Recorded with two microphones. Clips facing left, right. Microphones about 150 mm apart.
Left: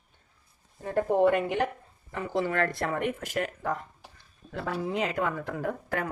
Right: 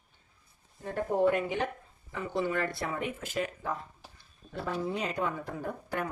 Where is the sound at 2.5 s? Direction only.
85° left.